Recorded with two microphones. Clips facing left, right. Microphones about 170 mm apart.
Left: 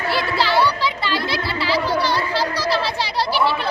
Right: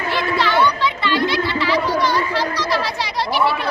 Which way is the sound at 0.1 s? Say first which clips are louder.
Right 1 dB; 35° left (ahead or behind).